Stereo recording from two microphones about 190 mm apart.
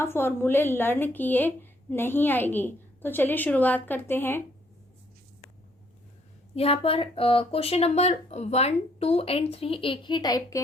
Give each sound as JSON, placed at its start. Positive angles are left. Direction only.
{"t": 0.0, "sound": "speech", "side_deg": 10}
{"t": 6.6, "sound": "speech", "side_deg": 30}